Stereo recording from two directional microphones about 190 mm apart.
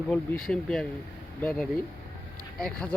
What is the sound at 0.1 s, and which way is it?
Speech, 5° left (ahead or behind).